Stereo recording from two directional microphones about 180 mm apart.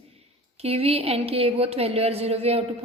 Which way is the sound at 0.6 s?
35° right (ahead or behind).